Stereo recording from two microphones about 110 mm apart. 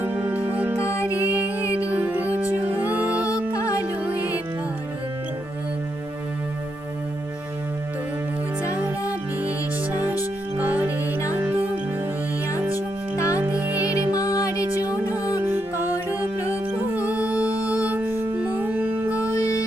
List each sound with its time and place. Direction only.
0.0 s music: 15° right (ahead or behind)
0.8 s music: 25° left (ahead or behind)
1.2 s music: 15° right (ahead or behind)
1.5 s music: 25° left (ahead or behind)
1.9 s music: 15° right (ahead or behind)
3.5 s music: 30° left (ahead or behind)
4.0 s music: 15° right (ahead or behind)
9.9 s music: 15° right (ahead or behind)
12.7 s music: 30° left (ahead or behind)
13.4 s music: 15° right (ahead or behind)
14.1 s music: 30° left (ahead or behind)
15.4 s music: 20° right (ahead or behind)
19.4 s music: 30° left (ahead or behind)